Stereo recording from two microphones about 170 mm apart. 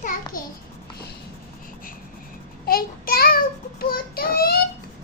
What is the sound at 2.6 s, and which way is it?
Child singing, 60° left (ahead or behind).